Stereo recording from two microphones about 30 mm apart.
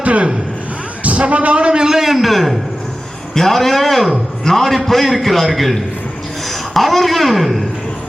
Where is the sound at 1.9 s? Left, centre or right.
Centre.